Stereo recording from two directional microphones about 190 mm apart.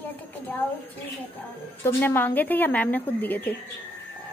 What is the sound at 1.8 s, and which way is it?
A woman's voice, 10° left (ahead or behind).